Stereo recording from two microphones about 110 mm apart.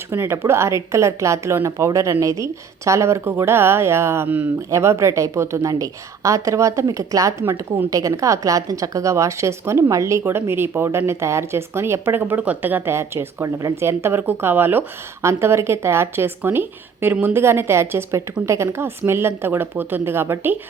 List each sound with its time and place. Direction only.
0.1 s a woman's voice: 20° right (ahead or behind)